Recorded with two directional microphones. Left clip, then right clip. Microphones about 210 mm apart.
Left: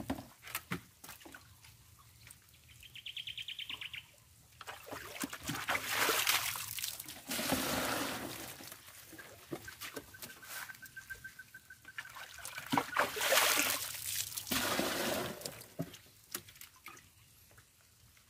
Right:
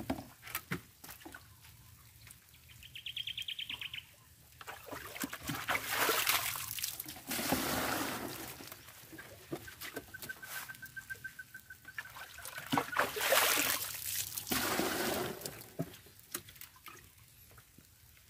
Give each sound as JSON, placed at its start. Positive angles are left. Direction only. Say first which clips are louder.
{"t": 0.0, "sound": "dog", "louder": "right 2 dB", "side_deg": 10}
{"t": 2.9, "sound": "bird", "louder": "right 3 dB", "side_deg": 20}
{"t": 4.6, "sound": "boat", "louder": "even", "side_deg": 10}
{"t": 9.5, "sound": "a sound", "louder": "right 1 dB", "side_deg": 15}
{"t": 11.9, "sound": "trickle", "louder": "right 1 dB", "side_deg": 10}